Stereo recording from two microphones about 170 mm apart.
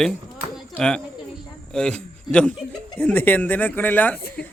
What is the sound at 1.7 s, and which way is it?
A man's voice, 5° left (ahead or behind).